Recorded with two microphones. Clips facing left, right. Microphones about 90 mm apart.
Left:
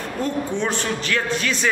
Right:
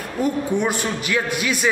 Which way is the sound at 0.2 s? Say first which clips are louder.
Right 3 dB; 10° right (ahead or behind).